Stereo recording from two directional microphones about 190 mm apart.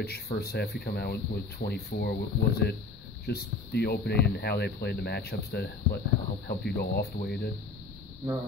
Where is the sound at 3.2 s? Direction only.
60° left (ahead or behind).